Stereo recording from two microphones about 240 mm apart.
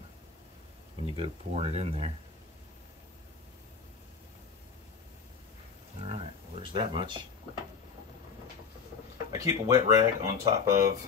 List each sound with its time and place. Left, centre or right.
1.1 s speech: right
6.0 s a sound: right
9.3 s speech: centre